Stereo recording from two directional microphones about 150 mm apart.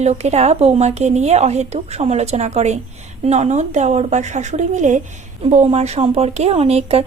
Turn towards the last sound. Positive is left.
turn(degrees=-40)  # may be behind; listen again after turning